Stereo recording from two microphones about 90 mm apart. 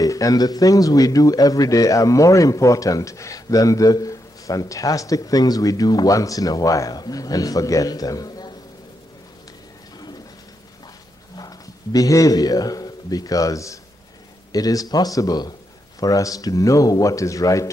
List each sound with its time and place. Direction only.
0.0 s speech: 40° left (ahead or behind)
11.3 s a man's voice: 45° left (ahead or behind)